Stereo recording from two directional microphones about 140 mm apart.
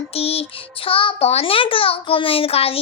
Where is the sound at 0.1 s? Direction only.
45° left (ahead or behind).